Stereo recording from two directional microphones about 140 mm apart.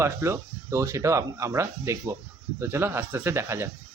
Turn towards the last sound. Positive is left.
turn(degrees=-20)  # may be behind; listen again after turning